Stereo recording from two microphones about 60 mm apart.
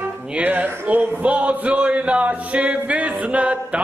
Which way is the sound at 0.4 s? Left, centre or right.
Right.